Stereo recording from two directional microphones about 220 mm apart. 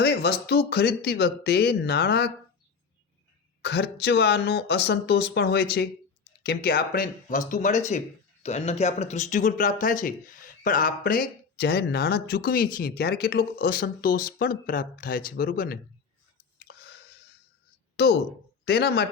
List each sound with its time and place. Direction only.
0.0 s speech: 45° left (ahead or behind)
3.6 s speech: 50° left (ahead or behind)
16.6 s a sound: 50° left (ahead or behind)
17.9 s speech: 45° left (ahead or behind)